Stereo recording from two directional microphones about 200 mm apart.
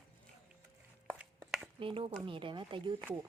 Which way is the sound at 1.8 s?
25° right (ahead or behind).